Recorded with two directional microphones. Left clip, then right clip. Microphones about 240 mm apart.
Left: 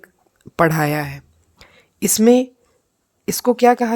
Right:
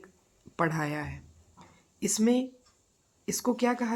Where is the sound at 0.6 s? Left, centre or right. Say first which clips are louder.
Left 13 dB; left.